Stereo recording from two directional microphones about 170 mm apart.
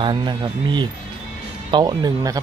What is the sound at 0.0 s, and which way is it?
Speech, 30° right (ahead or behind).